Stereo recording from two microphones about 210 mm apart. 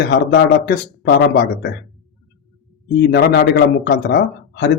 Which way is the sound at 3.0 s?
50° left (ahead or behind).